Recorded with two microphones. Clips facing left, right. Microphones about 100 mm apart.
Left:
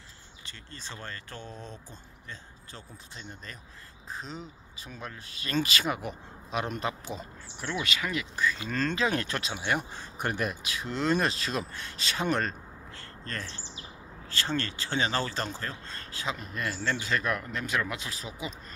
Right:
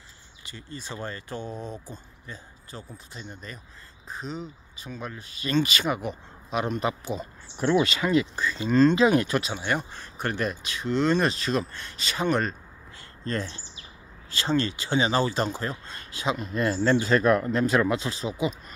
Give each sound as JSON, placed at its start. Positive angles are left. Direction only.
{"t": 0.5, "sound": "speech", "side_deg": -10}
{"t": 7.8, "sound": "speech", "side_deg": -30}
{"t": 9.9, "sound": "speech", "side_deg": 15}
{"t": 13.2, "sound": "speech", "side_deg": -20}